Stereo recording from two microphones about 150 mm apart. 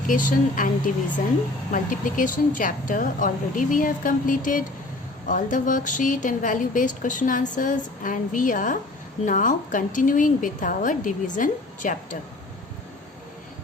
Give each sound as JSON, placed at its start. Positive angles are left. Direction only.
{"t": 0.1, "sound": "a woman's voice", "side_deg": 60}
{"t": 1.7, "sound": "a woman's voice", "side_deg": 60}